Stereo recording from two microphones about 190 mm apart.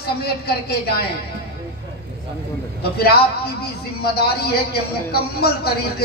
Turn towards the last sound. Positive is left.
turn(degrees=55)  # may be behind; listen again after turning